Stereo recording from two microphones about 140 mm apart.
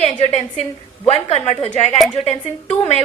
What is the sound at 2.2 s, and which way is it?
Speech, 50° left (ahead or behind).